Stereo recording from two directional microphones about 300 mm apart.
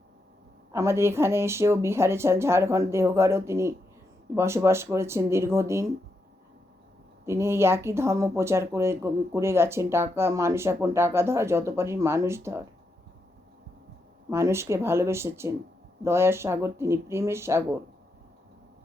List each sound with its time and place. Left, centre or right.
0.7 s speech: centre
7.3 s speech: centre
14.3 s speech: centre